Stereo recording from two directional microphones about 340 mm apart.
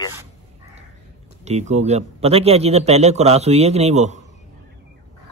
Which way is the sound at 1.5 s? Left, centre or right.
Centre.